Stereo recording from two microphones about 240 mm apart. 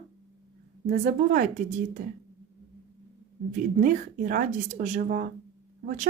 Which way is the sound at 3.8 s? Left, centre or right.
Right.